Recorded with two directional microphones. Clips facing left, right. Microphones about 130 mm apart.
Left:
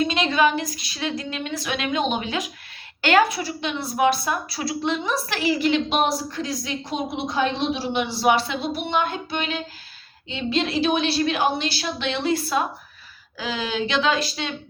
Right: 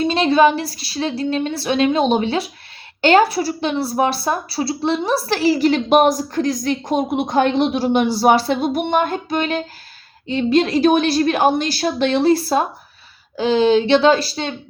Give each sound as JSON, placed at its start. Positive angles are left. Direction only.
{"t": 0.0, "sound": "a woman's voice", "side_deg": -35}